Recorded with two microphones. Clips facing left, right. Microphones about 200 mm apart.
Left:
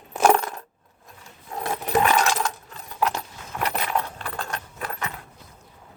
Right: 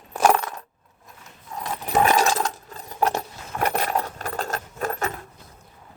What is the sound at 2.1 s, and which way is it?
Coin, 35° right (ahead or behind).